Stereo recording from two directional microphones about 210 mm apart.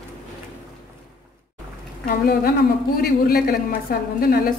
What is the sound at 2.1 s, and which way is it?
A woman's voice, 45° left (ahead or behind).